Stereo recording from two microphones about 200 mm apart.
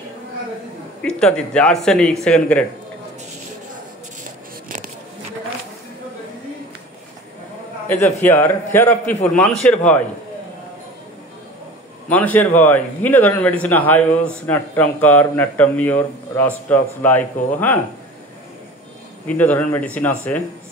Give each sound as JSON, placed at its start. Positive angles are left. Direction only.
{"t": 1.0, "sound": "speech", "side_deg": 5}
{"t": 4.6, "sound": "a sound", "side_deg": -40}
{"t": 7.9, "sound": "speech", "side_deg": 10}
{"t": 12.1, "sound": "speech", "side_deg": 10}
{"t": 19.2, "sound": "speech", "side_deg": 10}